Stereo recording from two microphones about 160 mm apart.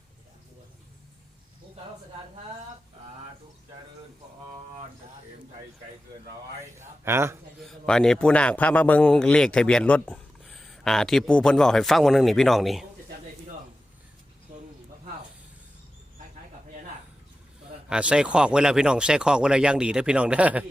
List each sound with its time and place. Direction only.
6.7 s speech: 15° right (ahead or behind)
7.6 s a man's voice: 5° left (ahead or behind)
17.8 s a man's voice: 5° right (ahead or behind)